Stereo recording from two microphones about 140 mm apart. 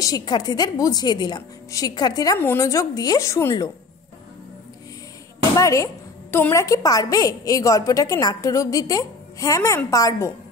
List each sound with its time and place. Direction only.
0.0 s a woman's voice: 30° left (ahead or behind)
2.3 s a woman's voice: 15° left (ahead or behind)
5.6 s a woman's voice: 25° left (ahead or behind)